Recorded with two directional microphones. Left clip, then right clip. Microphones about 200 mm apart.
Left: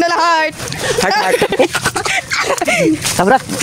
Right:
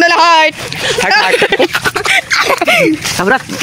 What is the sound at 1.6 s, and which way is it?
Speech, 5° left (ahead or behind).